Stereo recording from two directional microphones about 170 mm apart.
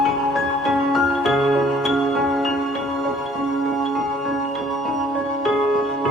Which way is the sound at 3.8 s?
Centre (ahead or behind).